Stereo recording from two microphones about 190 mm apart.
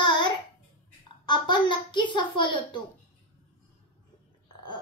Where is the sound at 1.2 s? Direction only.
25° left (ahead or behind).